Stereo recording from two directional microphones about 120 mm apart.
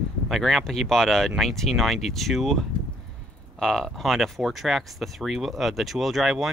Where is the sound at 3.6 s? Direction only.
Centre (ahead or behind).